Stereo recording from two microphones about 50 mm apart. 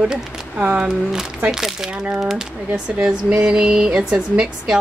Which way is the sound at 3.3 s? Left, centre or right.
Centre.